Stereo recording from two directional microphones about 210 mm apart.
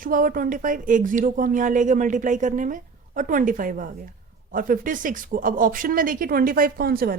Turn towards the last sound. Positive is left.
turn(degrees=-45)  # may be behind; listen again after turning